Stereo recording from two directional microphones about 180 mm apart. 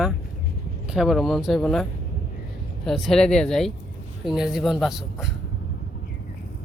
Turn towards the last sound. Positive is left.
turn(degrees=-5)  # may be behind; listen again after turning